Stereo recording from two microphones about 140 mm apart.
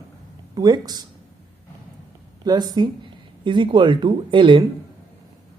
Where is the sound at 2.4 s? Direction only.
30° right (ahead or behind).